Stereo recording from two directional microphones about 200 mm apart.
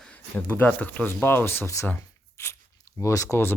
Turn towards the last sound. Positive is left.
turn(degrees=15)  # may be behind; listen again after turning